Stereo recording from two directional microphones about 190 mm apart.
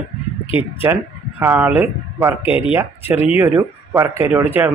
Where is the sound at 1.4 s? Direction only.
10° right (ahead or behind).